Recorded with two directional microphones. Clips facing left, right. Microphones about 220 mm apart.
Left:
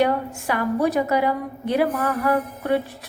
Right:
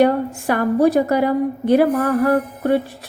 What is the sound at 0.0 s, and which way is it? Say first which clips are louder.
Speech: right 5 dB; 45° right (ahead or behind).